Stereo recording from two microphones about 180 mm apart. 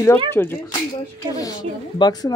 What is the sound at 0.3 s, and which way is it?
A woman's voice, 10° left (ahead or behind).